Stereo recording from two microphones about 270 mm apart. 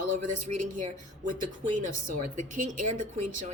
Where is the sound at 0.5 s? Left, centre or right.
Right.